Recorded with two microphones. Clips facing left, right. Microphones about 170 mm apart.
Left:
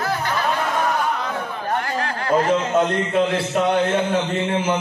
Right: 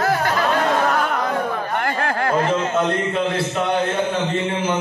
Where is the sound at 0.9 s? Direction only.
70° right (ahead or behind).